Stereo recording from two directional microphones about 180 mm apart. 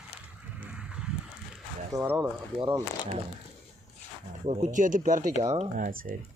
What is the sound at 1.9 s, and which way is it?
Speech, 15° right (ahead or behind).